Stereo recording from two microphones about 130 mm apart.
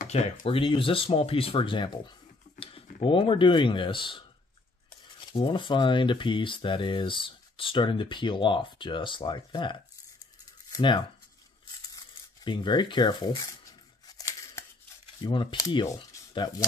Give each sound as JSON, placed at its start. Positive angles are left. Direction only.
{"t": 0.0, "sound": "speech", "side_deg": 80}
{"t": 0.5, "sound": "speech", "side_deg": 45}
{"t": 5.3, "sound": "speech", "side_deg": 40}
{"t": 12.4, "sound": "a sound", "side_deg": 35}
{"t": 15.1, "sound": "speech", "side_deg": 35}